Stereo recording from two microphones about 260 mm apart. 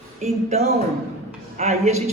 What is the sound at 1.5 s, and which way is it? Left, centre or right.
Speech, right.